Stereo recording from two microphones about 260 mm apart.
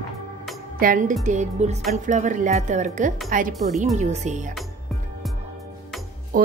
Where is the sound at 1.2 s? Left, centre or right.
Right.